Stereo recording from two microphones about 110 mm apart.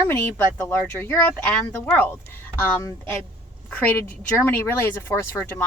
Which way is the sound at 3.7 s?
15° left (ahead or behind).